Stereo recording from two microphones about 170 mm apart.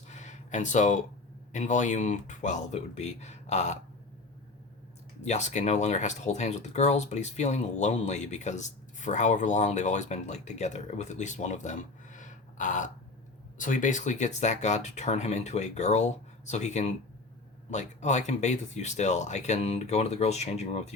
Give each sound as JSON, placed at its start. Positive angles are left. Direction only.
{"t": 0.1, "sound": "a sound", "side_deg": 45}
{"t": 1.5, "sound": "speech", "side_deg": 45}
{"t": 5.2, "sound": "speech", "side_deg": 40}